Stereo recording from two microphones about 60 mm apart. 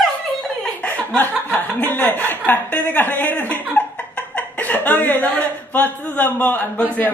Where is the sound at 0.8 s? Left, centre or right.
Centre.